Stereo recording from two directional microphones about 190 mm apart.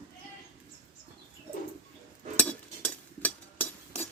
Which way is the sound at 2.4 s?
10° left (ahead or behind).